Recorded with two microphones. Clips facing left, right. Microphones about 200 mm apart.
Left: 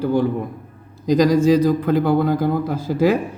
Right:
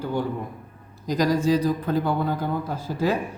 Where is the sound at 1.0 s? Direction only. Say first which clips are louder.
Left 7 dB; 90° left.